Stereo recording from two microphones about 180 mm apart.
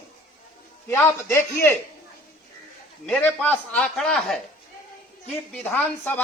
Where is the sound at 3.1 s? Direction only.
10° left (ahead or behind).